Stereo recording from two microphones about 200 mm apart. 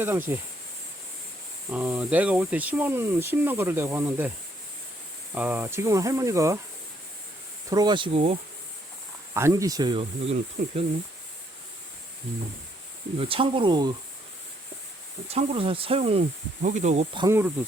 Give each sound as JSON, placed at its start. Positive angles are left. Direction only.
{"t": 0.3, "sound": "speech", "side_deg": -15}
{"t": 1.7, "sound": "speech", "side_deg": -5}
{"t": 5.3, "sound": "speech", "side_deg": -10}
{"t": 7.7, "sound": "speech", "side_deg": -20}
{"t": 9.3, "sound": "speech", "side_deg": -15}
{"t": 10.6, "sound": "speech", "side_deg": -40}
{"t": 13.1, "sound": "speech", "side_deg": -30}
{"t": 15.3, "sound": "speech", "side_deg": -30}
{"t": 17.2, "sound": "speech", "side_deg": -10}